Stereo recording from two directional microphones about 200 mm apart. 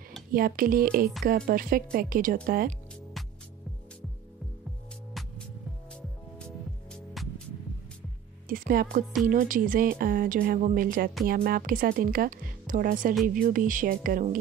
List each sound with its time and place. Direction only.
0.3 s speech: 45° right (ahead or behind)
6.9 s music: 5° left (ahead or behind)
8.5 s music: 45° right (ahead or behind)
9.3 s speech: 45° right (ahead or behind)